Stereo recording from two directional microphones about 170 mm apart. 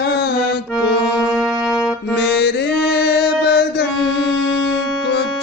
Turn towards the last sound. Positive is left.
turn(degrees=75)  # may be behind; listen again after turning